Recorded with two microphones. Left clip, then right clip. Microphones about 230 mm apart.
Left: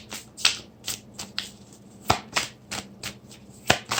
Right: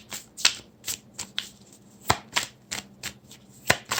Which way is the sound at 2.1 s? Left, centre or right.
Centre.